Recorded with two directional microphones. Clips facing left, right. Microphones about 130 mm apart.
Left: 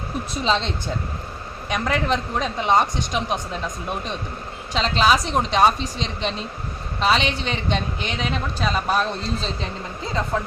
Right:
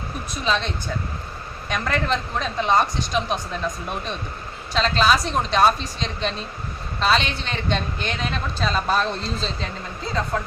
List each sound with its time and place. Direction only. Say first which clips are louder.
0.4 s speech: left 1 dB; 25° left (ahead or behind)
1.7 s a man's voice: left 1 dB; 15° left (ahead or behind)
4.7 s a man's voice: even; 15° left (ahead or behind)